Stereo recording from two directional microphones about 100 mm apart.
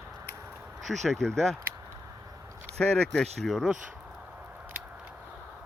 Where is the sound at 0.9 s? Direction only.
5° left (ahead or behind).